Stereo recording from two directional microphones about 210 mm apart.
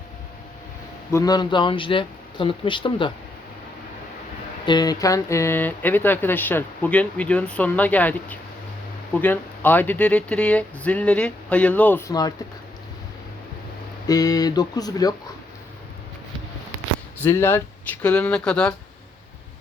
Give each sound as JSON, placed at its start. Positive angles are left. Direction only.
{"t": 1.1, "sound": "speech", "side_deg": 15}
{"t": 4.6, "sound": "speech", "side_deg": 20}
{"t": 14.1, "sound": "speech", "side_deg": 20}
{"t": 17.2, "sound": "speech", "side_deg": 10}